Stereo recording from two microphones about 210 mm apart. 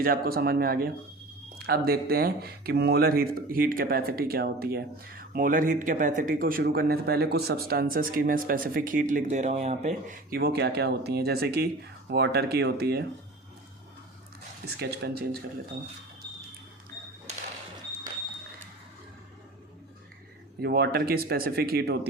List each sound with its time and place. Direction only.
0.0 s speech: 45° right (ahead or behind)
14.6 s speech: 50° right (ahead or behind)
20.6 s speech: 50° right (ahead or behind)